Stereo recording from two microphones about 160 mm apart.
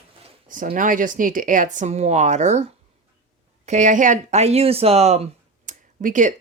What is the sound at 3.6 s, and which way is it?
Speech, 50° right (ahead or behind).